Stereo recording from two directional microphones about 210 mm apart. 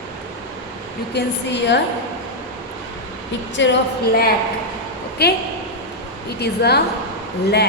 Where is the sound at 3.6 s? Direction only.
60° left (ahead or behind).